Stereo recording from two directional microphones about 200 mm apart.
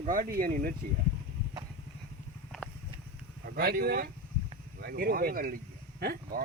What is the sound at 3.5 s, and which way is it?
Speech, 50° right (ahead or behind).